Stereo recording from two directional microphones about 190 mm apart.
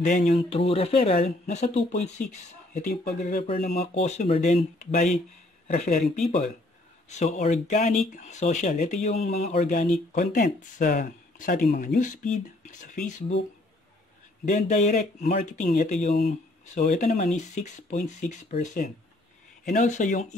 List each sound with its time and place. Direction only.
0.0 s speech: 40° left (ahead or behind)
7.1 s speech: 35° left (ahead or behind)
11.7 s speech: 55° left (ahead or behind)
12.0 s speech: 40° left (ahead or behind)
14.4 s speech: 40° left (ahead or behind)